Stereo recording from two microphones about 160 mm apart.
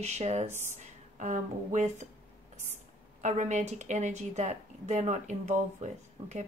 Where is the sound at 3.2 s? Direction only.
50° right (ahead or behind).